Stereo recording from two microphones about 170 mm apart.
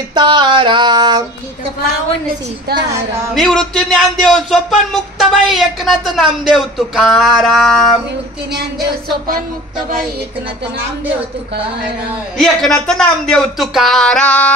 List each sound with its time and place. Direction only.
0.1 s a sound: 25° right (ahead or behind)
3.3 s speech: centre (ahead or behind)
12.4 s speech: 5° left (ahead or behind)